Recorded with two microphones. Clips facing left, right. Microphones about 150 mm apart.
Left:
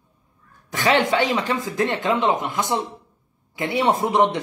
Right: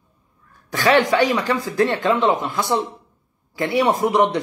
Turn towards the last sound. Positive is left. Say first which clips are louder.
# right 2 dB
turn(degrees=20)  # may be behind; listen again after turning